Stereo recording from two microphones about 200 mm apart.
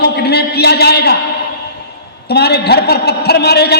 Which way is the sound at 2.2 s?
55° left (ahead or behind).